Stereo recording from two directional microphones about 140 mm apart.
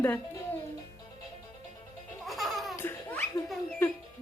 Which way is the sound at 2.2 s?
Centre (ahead or behind).